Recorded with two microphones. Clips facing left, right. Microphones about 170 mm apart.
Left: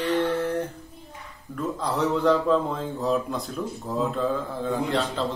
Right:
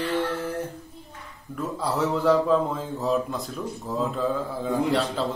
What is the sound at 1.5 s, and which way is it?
A man's voice, 5° right (ahead or behind).